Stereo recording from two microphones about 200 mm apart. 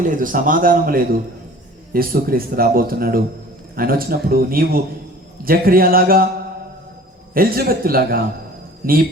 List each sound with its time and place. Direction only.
0.0 s a man's voice: 40° right (ahead or behind)
7.3 s a man's voice: 50° right (ahead or behind)